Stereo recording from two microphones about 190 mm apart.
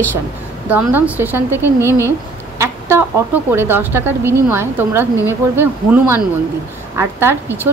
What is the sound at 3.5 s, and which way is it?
A woman's voice, 10° right (ahead or behind).